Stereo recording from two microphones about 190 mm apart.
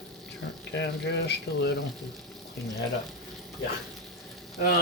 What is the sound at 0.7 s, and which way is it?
Speech, 65° left (ahead or behind).